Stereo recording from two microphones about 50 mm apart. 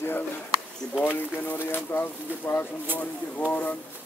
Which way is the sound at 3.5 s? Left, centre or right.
Left.